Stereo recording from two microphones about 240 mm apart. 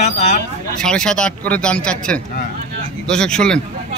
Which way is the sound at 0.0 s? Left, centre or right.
Left.